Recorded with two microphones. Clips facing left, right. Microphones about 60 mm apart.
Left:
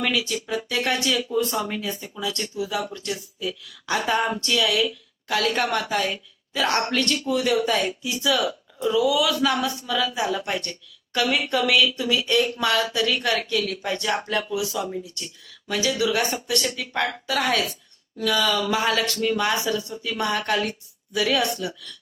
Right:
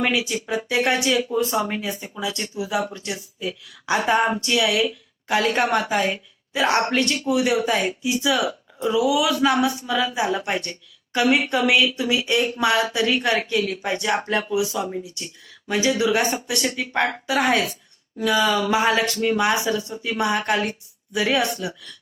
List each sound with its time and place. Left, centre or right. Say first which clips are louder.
0.0 s speech: right 2 dB; right